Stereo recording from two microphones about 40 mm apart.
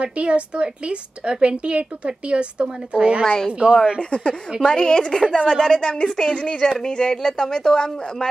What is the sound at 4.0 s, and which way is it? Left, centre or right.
Speech, left.